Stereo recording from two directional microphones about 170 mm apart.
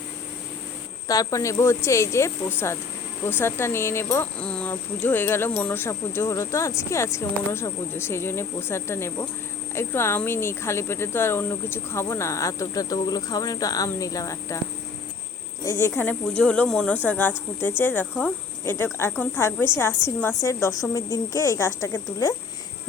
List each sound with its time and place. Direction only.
1.0 s speech: 20° left (ahead or behind)
15.6 s a woman's voice: 15° left (ahead or behind)